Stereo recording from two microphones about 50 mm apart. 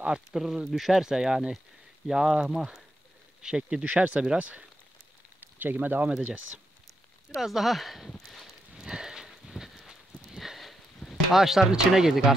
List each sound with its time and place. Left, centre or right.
0.0 s speech: centre
5.4 s speech: right
7.3 s speech: centre
8.3 s a sound: centre
8.7 s a sound: centre
11.3 s speech: centre